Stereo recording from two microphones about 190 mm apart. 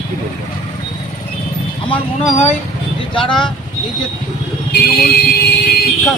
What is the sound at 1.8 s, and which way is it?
Speech, 30° left (ahead or behind).